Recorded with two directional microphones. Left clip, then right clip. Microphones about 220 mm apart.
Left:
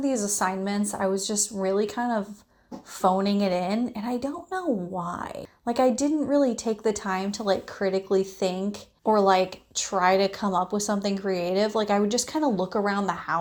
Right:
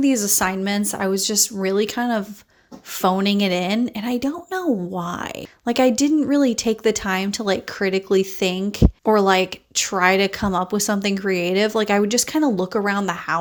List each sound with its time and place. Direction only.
0.0 s speech: 45° right (ahead or behind)
12.9 s speech: 90° right